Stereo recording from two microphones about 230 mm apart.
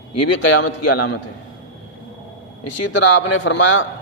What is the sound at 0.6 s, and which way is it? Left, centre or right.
Speech, left.